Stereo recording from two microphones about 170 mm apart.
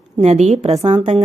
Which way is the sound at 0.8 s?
30° right (ahead or behind).